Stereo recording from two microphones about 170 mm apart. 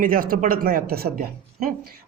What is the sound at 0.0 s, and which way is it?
Speech, 55° right (ahead or behind).